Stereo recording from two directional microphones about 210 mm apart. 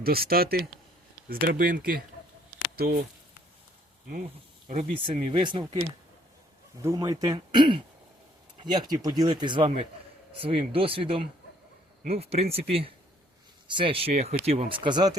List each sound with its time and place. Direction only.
0.0 s speech: 45° right (ahead or behind)
4.7 s speech: 30° right (ahead or behind)
6.8 s speech: 15° right (ahead or behind)